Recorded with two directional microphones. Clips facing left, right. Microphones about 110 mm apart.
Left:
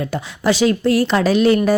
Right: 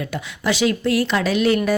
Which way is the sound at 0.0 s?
35° left (ahead or behind).